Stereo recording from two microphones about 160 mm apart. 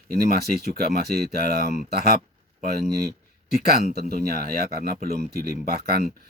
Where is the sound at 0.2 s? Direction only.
80° right.